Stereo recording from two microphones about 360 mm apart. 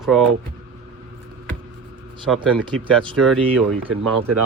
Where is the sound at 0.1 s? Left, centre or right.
Centre.